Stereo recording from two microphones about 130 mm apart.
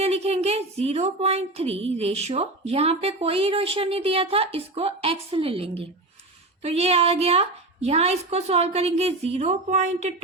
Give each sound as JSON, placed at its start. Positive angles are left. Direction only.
{"t": 0.0, "sound": "speech", "side_deg": -55}